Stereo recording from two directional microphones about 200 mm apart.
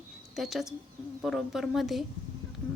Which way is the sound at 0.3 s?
Centre (ahead or behind).